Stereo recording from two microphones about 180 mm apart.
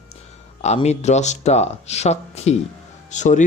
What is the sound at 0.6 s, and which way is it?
Speech, 35° left (ahead or behind).